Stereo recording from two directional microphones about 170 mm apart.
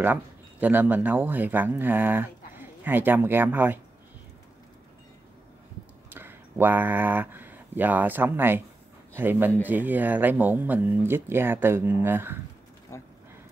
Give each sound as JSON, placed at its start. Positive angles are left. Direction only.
{"t": 0.0, "sound": "speech", "side_deg": -10}
{"t": 6.0, "sound": "speech", "side_deg": -10}
{"t": 12.9, "sound": "speech", "side_deg": 15}